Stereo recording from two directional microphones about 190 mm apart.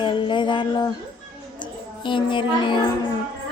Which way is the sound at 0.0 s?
25° left (ahead or behind).